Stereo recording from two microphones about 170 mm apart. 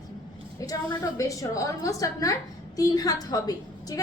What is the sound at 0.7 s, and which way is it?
A woman's voice, 20° left (ahead or behind).